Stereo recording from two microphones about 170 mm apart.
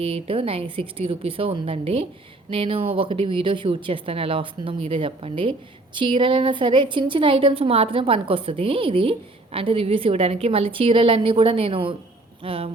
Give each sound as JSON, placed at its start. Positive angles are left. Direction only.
{"t": 0.0, "sound": "a woman's voice", "side_deg": -35}